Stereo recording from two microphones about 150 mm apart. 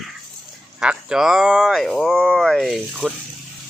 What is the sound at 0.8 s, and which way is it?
Speech, 5° right (ahead or behind).